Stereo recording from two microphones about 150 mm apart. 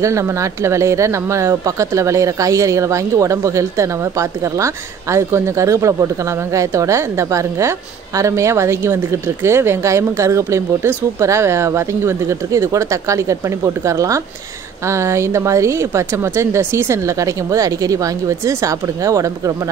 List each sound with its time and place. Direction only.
0.0 s speech: 20° right (ahead or behind)